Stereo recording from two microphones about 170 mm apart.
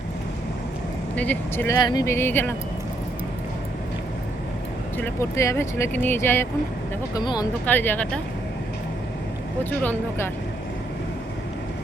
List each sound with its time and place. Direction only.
1.1 s speech: 10° left (ahead or behind)
4.9 s speech: 15° left (ahead or behind)
7.1 s speech: 25° left (ahead or behind)
7.6 s speech: 10° left (ahead or behind)
9.6 s speech: 10° left (ahead or behind)